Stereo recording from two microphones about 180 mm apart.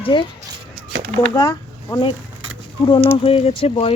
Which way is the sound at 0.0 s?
25° left (ahead or behind).